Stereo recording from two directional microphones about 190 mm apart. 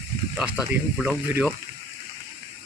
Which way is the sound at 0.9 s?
5° right (ahead or behind).